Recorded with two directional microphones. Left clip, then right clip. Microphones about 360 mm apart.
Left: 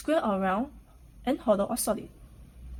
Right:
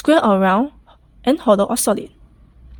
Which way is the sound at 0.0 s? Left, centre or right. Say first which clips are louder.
Right 13 dB; right.